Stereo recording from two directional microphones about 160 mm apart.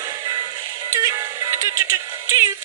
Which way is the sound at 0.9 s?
25° right (ahead or behind).